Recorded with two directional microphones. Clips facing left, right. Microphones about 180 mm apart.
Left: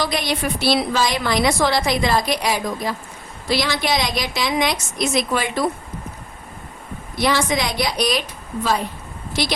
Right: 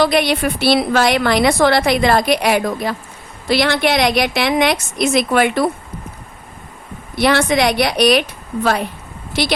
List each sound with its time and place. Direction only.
0.0 s a woman's voice: 65° right (ahead or behind)
7.2 s a woman's voice: 65° right (ahead or behind)